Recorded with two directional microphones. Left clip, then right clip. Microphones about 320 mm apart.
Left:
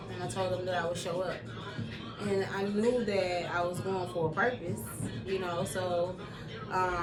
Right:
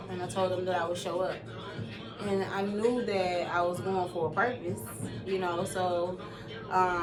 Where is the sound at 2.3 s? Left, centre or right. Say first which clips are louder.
Right 1 dB; centre.